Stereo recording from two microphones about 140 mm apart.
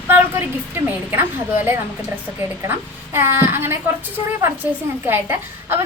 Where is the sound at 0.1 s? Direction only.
15° right (ahead or behind).